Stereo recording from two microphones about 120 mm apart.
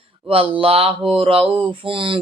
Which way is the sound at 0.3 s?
50° right (ahead or behind).